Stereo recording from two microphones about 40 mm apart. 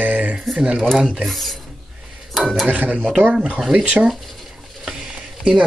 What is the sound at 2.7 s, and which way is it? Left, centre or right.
Speech, right.